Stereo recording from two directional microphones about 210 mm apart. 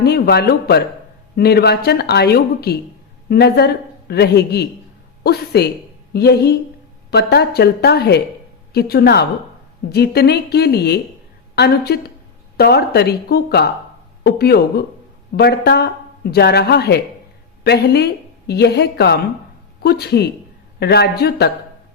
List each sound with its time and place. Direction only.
0.0 s speech: 50° left (ahead or behind)